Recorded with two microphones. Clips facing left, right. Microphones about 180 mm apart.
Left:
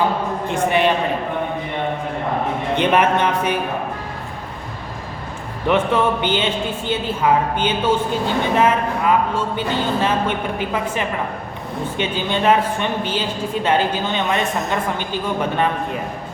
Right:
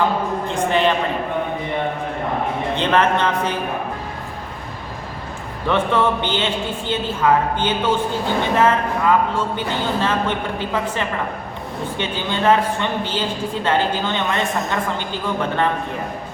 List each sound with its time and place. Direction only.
0.4 s a sound: 15° left (ahead or behind)
2.7 s speech: 15° left (ahead or behind)
5.6 s speech: 10° left (ahead or behind)